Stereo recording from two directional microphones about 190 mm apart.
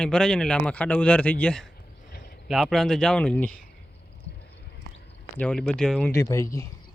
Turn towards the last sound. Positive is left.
turn(degrees=15)  # may be behind; listen again after turning